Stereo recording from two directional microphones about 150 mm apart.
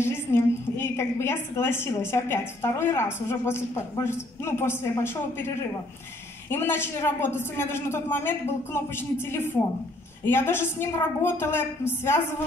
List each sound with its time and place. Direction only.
0.0 s a woman's voice: 15° left (ahead or behind)
6.5 s a woman's voice: 15° left (ahead or behind)